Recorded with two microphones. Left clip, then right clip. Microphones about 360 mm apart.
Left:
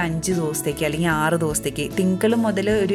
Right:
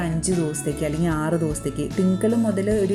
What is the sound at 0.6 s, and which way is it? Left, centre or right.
Speech, left.